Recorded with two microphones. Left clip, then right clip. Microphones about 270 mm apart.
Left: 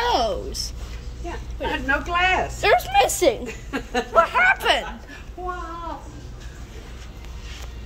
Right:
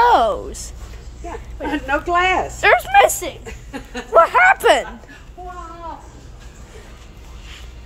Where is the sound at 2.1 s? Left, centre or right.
Right.